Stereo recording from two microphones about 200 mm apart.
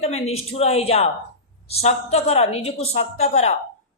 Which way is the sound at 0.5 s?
30° left (ahead or behind).